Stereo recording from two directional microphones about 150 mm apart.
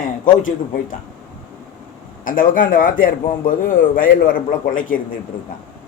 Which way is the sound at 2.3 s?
65° left (ahead or behind).